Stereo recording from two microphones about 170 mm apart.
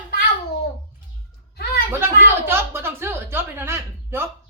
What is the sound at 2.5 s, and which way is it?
A woman's voice, 15° right (ahead or behind).